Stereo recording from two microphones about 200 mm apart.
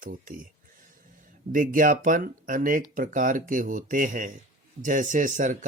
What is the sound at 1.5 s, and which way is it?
Speech, 45° right (ahead or behind).